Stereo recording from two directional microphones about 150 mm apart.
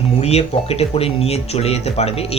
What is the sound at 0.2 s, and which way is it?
Speech, 45° left (ahead or behind).